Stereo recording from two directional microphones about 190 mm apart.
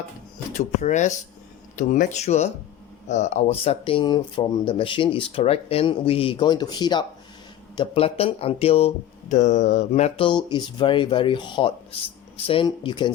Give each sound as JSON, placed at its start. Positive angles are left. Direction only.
{"t": 0.5, "sound": "speech", "side_deg": 40}